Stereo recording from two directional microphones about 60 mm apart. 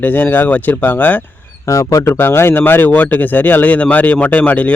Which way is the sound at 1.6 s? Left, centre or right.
Left.